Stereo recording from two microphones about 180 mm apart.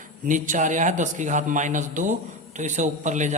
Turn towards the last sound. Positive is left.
turn(degrees=-40)  # may be behind; listen again after turning